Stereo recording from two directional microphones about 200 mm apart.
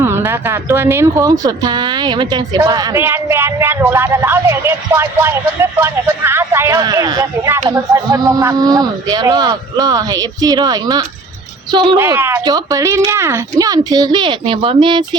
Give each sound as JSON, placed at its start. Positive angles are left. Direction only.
{"t": 0.0, "sound": "speech", "side_deg": -10}
{"t": 11.9, "sound": "speech", "side_deg": -10}